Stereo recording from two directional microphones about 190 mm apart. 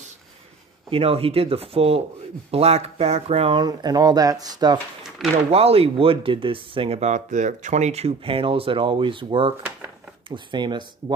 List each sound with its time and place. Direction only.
0.8 s speech: 30° right (ahead or behind)
5.5 s speech: 30° right (ahead or behind)